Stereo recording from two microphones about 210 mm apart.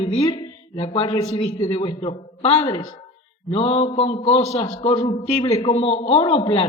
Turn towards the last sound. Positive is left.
turn(degrees=25)  # may be behind; listen again after turning